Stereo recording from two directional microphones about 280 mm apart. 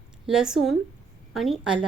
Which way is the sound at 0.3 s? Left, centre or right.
Centre.